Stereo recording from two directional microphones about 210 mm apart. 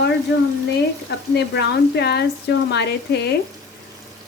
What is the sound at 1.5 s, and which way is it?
Speech, 50° left (ahead or behind).